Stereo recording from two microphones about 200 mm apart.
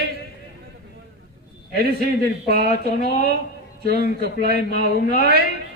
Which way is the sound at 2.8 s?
55° right (ahead or behind).